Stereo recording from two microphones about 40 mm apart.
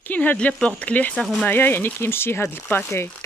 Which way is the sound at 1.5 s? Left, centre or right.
Left.